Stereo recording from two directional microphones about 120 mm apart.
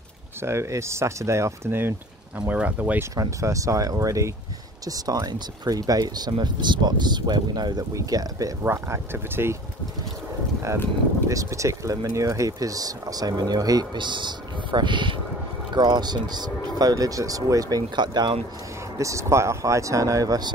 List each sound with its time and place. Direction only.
0.4 s speech: 25° right (ahead or behind)
3.2 s speech: 25° right (ahead or behind)
11.2 s speech: 25° right (ahead or behind)
18.9 s speech: 25° right (ahead or behind)